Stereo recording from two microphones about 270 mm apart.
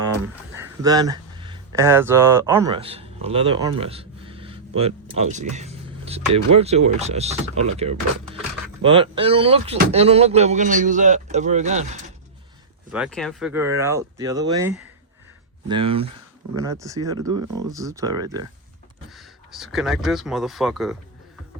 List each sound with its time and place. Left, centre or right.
0.5 s a man's voice: centre; by 11.9 s right
12.9 s speech: centre
15.7 s a man's voice: centre
19.1 s speech: centre